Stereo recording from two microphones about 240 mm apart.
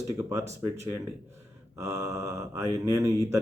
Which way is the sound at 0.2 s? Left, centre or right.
Centre.